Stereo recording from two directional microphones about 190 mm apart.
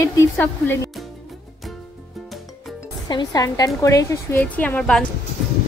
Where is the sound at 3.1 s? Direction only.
20° left (ahead or behind).